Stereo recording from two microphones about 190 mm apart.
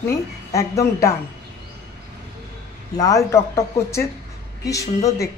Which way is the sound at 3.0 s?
15° left (ahead or behind).